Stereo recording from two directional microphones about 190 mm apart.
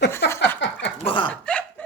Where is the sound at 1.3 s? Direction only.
5° left (ahead or behind).